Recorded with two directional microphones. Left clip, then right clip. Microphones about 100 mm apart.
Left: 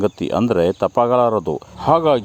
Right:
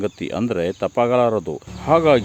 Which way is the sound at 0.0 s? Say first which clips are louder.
Left 5 dB; 40° left (ahead or behind).